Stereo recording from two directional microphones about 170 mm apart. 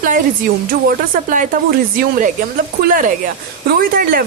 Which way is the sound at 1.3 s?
50° right (ahead or behind).